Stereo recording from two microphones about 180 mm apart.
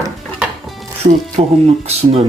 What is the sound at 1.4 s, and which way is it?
Speech, 35° right (ahead or behind).